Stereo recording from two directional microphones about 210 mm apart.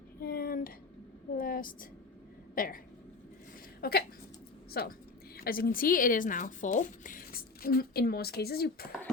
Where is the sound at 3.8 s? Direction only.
45° left (ahead or behind).